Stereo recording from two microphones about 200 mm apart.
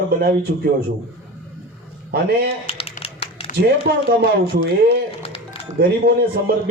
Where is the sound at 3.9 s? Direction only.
50° right (ahead or behind).